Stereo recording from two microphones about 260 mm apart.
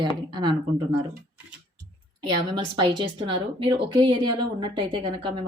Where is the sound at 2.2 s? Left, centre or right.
Centre.